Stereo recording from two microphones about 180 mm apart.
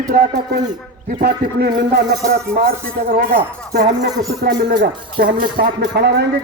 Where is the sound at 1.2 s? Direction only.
60° right (ahead or behind).